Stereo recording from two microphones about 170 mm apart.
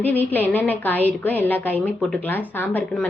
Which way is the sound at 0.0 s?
10° left (ahead or behind).